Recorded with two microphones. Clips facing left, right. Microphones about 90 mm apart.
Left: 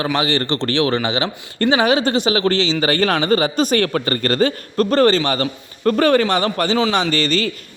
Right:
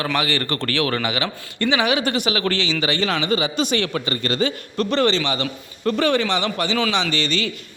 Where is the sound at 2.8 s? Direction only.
50° left (ahead or behind).